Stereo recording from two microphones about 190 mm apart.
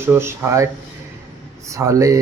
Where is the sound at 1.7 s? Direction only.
15° right (ahead or behind).